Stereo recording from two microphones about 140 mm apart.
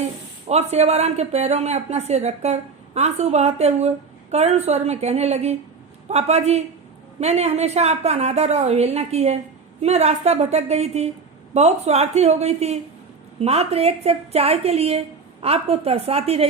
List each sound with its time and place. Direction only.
0.4 s speech: 50° right (ahead or behind)